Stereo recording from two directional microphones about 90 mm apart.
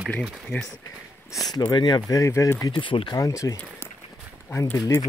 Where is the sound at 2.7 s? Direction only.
70° left (ahead or behind).